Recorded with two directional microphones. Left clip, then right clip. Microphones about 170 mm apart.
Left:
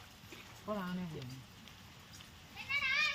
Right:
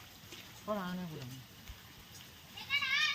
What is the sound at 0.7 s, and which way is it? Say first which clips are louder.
Speech: right 3 dB; 55° right (ahead or behind).